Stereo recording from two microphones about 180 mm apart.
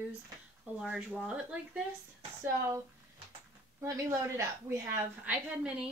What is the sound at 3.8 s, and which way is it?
A woman's voice, 15° right (ahead or behind).